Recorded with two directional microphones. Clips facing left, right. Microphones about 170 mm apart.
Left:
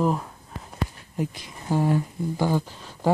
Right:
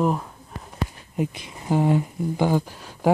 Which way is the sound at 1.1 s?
20° right (ahead or behind).